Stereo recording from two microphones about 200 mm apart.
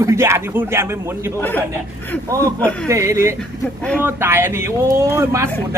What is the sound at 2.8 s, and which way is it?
Speech, 15° right (ahead or behind).